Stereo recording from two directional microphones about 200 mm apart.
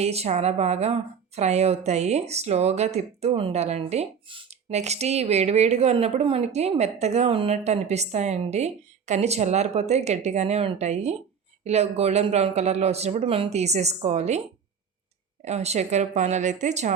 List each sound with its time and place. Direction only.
0.0 s speech: 30° right (ahead or behind)
15.4 s speech: 35° right (ahead or behind)